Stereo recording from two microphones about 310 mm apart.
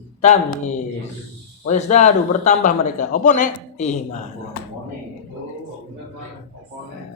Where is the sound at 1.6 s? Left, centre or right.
Left.